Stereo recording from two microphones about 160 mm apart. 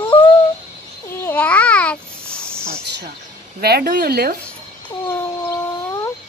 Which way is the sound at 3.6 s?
75° right (ahead or behind).